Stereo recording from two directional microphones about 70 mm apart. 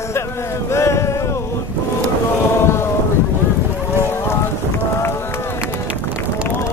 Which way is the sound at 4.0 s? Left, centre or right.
Left.